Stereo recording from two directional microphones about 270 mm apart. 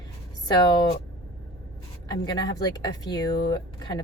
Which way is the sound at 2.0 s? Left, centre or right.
Centre.